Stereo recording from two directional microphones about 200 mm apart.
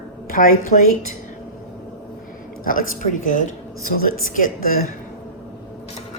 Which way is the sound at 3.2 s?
40° left (ahead or behind).